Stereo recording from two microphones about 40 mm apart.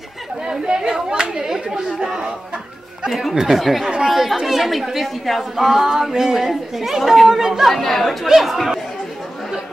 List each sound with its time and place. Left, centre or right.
0.5 s chatter: centre
3.1 s speech: centre
3.3 s a woman's voice: centre
3.6 s a woman's voice: centre
7.7 s speech: centre